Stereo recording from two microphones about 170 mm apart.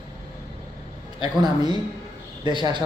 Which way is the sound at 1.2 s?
25° right (ahead or behind).